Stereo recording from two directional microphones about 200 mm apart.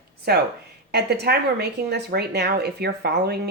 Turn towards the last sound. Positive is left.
turn(degrees=-55)  # may be behind; listen again after turning